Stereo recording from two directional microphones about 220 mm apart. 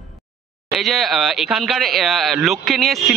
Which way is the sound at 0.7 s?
Centre (ahead or behind).